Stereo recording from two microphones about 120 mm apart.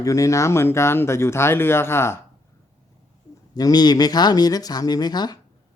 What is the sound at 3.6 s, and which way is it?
Speech, 35° left (ahead or behind).